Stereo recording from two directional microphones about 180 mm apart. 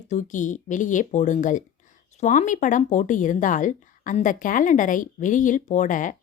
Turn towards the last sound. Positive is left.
turn(degrees=45)  # may be behind; listen again after turning